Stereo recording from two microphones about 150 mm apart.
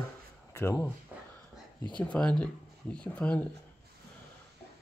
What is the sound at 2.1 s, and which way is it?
Speech, 10° left (ahead or behind).